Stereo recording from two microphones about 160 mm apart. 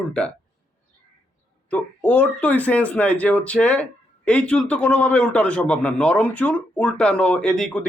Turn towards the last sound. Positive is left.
turn(degrees=5)  # may be behind; listen again after turning